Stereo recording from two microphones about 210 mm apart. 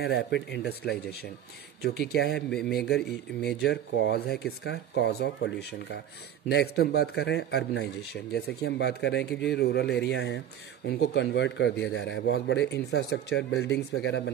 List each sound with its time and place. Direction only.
0.0 s a man's voice: 55° left (ahead or behind)